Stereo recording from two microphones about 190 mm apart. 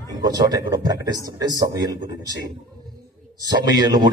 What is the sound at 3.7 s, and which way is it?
Speech, 20° right (ahead or behind).